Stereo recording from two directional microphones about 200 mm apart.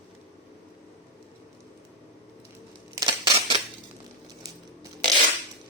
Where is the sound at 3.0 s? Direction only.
20° right (ahead or behind).